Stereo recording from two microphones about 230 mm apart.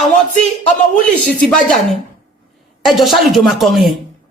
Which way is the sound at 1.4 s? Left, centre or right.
Centre.